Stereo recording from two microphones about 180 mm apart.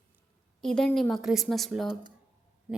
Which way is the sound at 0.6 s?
5° left (ahead or behind).